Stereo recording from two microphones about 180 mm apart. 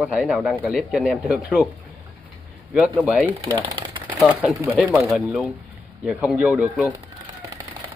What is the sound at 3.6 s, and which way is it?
Typewriter, 25° right (ahead or behind).